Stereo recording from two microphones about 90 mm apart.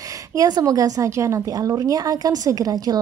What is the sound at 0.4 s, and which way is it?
A woman's voice, 45° right (ahead or behind).